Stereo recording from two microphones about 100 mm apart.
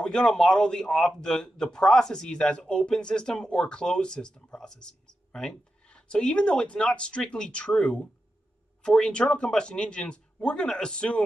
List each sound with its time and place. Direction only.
0.0 s speech: 5° left (ahead or behind)